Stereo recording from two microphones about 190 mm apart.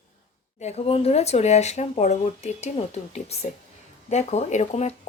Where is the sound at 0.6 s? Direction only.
35° left (ahead or behind).